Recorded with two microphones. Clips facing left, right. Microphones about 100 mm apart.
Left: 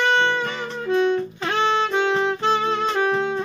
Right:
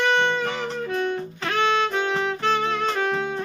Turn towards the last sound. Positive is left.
turn(degrees=25)  # may be behind; listen again after turning